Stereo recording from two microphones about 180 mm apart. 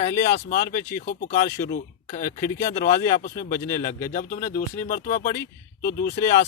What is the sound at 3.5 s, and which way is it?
Speech, 15° left (ahead or behind).